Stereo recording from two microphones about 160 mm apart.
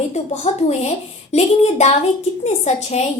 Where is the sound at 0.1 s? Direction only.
45° left (ahead or behind).